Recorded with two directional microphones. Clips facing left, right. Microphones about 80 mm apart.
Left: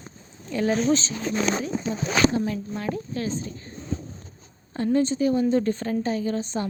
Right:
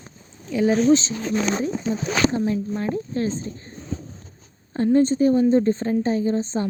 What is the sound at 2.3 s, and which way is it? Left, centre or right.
Speech, right.